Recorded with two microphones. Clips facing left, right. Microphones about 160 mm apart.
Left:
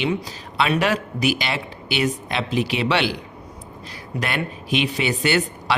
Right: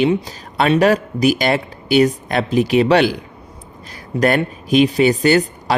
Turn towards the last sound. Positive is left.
turn(degrees=-40)  # may be behind; listen again after turning